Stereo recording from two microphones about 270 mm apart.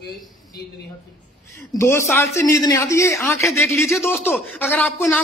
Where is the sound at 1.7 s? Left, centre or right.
Centre.